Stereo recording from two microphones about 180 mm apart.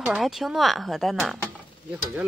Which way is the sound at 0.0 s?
Centre (ahead or behind).